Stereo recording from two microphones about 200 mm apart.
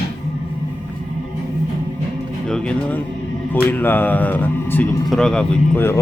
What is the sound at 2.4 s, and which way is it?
Speech, 5° left (ahead or behind).